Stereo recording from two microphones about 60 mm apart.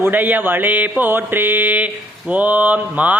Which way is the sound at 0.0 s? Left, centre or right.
Right.